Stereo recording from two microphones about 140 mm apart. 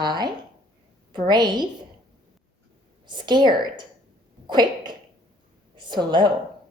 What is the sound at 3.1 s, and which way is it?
Speech, 30° right (ahead or behind).